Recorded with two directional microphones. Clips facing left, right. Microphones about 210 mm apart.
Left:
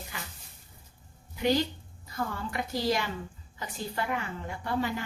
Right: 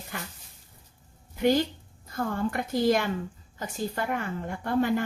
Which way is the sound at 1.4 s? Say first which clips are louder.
Right 3 dB; 50° right (ahead or behind).